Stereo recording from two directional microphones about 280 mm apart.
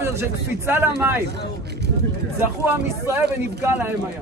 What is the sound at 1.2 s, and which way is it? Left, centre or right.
Speech, right.